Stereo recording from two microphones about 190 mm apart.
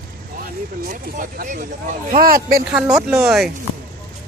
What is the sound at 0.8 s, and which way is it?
Speech, 50° right (ahead or behind).